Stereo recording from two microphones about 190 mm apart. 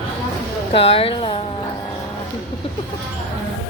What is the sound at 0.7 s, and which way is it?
Speech, 30° left (ahead or behind).